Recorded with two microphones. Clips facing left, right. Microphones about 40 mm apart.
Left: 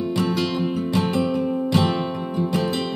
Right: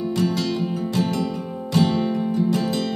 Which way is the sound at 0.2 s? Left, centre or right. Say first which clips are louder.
Even; left.